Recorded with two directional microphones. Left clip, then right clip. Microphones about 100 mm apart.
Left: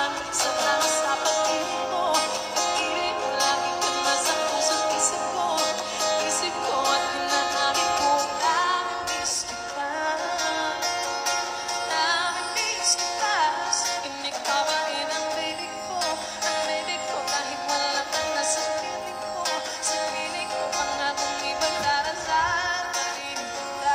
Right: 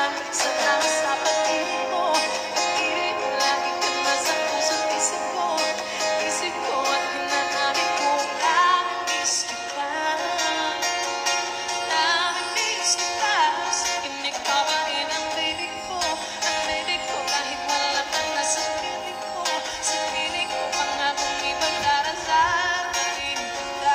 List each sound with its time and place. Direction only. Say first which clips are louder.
0.0 s music: right 2 dB; 15° left (ahead or behind); by 10.7 s 40° left (ahead or behind)
11.9 s music: right 3 dB; 50° left (ahead or behind)
16.0 s music: right 2 dB; 50° left (ahead or behind)
20.7 s music: right 3 dB; 45° left (ahead or behind)